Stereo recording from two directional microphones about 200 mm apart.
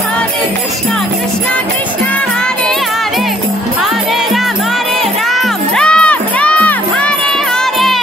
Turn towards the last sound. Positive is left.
turn(degrees=5)  # may be behind; listen again after turning